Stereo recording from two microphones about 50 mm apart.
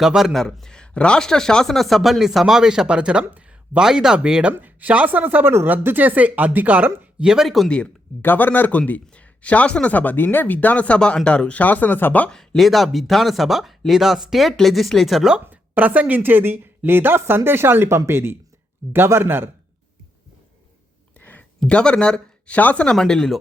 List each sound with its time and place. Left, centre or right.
0.1 s speech: centre
0.7 s a man's voice: centre
4.6 s speech: right
7.2 s speech: centre
7.4 s speech: centre
8.2 s speech: left
8.9 s speech: left
11.6 s speech: left
12.5 s speech: centre
15.4 s a woman's voice: right
17.8 s a woman's voice: right
21.2 s a sound: left
21.7 s speech: left
23.0 s a man's voice: centre